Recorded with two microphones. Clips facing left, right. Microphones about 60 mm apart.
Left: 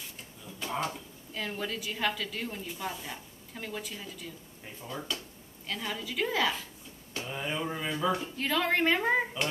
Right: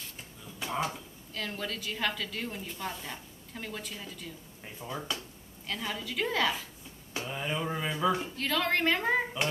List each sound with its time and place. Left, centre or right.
0.6 s speech: centre
1.3 s a woman's voice: centre
4.7 s speech: centre
5.7 s a woman's voice: centre
8.4 s a woman's voice: centre